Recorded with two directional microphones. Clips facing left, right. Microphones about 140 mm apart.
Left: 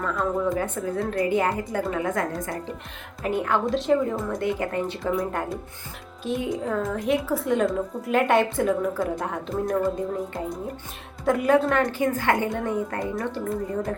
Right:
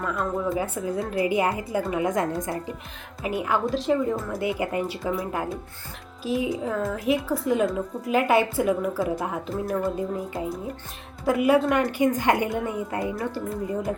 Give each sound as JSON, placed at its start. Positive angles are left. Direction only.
{"t": 0.0, "sound": "a woman's voice", "side_deg": -5}
{"t": 3.2, "sound": "speech", "side_deg": -5}
{"t": 11.3, "sound": "a woman's voice", "side_deg": -5}
{"t": 12.5, "sound": "a woman's voice", "side_deg": -5}